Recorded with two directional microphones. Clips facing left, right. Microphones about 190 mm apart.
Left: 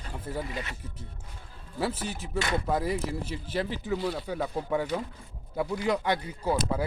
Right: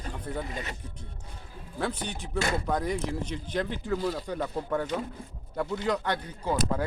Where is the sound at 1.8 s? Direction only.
5° left (ahead or behind).